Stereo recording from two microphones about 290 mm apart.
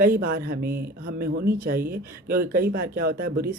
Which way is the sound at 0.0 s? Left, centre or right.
Right.